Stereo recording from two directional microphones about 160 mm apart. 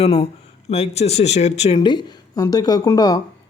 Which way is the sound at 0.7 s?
45° left (ahead or behind).